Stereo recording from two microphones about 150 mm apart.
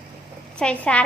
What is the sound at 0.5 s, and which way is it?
Speech, 10° left (ahead or behind).